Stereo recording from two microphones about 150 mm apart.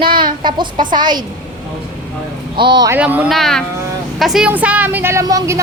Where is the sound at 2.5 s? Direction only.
30° right (ahead or behind).